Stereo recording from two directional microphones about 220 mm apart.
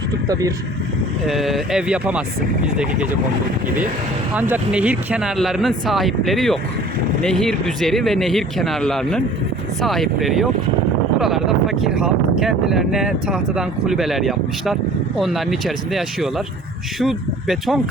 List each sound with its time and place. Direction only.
0.3 s speech: 15° right (ahead or behind)
1.3 s speech: centre (ahead or behind)
4.4 s speech: 5° right (ahead or behind)